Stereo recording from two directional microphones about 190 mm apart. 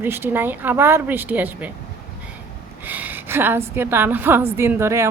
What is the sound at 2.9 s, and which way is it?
A woman's voice, 10° right (ahead or behind).